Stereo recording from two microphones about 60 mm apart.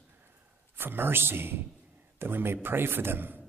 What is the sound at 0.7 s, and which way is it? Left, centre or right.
A man's voice, right.